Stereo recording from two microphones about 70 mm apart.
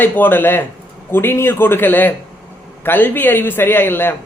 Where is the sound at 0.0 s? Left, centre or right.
Left.